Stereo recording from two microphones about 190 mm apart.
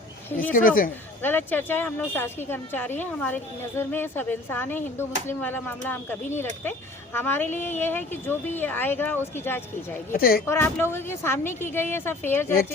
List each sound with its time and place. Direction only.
0.3 s a woman's voice: 10° left (ahead or behind)
0.5 s speech: 50° left (ahead or behind)
1.2 s a woman's voice: 10° left (ahead or behind)
10.1 s speech: 50° left (ahead or behind)
10.4 s a woman's voice: 15° left (ahead or behind)